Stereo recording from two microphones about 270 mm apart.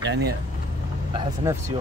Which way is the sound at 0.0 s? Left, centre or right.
Right.